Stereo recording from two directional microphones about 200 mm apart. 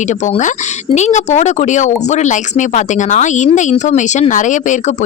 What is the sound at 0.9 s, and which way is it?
Speech, 35° left (ahead or behind).